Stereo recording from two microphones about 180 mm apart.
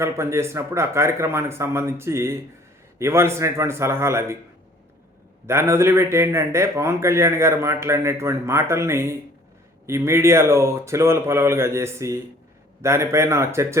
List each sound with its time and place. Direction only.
0.0 s a man's voice: 15° right (ahead or behind)
5.5 s a man's voice: 15° right (ahead or behind)